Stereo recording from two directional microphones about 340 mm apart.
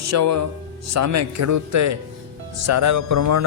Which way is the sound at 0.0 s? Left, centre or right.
Right.